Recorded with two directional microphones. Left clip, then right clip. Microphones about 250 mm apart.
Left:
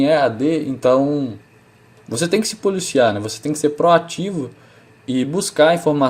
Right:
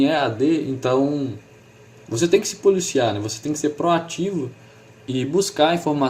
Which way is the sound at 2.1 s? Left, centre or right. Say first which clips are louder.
Right 1 dB; left.